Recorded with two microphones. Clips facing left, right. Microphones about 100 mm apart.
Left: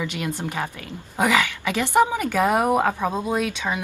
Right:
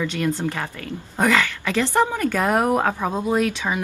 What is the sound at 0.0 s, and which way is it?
A woman's voice, 10° left (ahead or behind).